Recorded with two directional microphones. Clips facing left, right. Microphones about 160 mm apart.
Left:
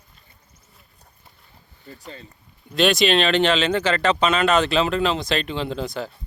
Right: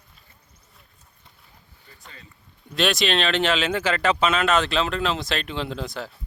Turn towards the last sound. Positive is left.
turn(degrees=0)  # may be behind; listen again after turning